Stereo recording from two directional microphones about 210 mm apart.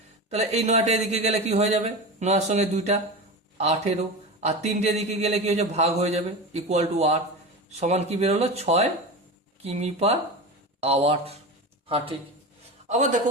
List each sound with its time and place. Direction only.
0.3 s a man's voice: 30° right (ahead or behind)
12.9 s a man's voice: 35° right (ahead or behind)